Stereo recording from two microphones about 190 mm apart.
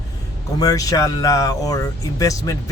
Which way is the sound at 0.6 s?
20° left (ahead or behind).